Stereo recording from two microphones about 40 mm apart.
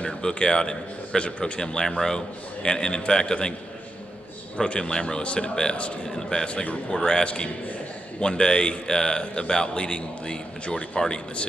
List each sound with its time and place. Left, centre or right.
0.0 s a man's voice: centre
4.6 s a man's voice: left
6.1 s a man's voice: centre
6.5 s a man's voice: left
7.0 s a man's voice: centre